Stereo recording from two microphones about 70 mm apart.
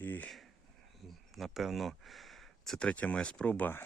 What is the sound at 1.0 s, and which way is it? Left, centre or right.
Speech, centre.